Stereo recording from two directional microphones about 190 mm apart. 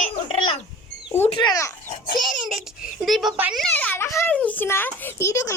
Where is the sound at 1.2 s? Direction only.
25° left (ahead or behind).